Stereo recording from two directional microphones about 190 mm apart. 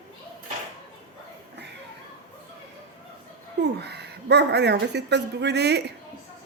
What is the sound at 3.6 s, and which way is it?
Speech, 60° right (ahead or behind).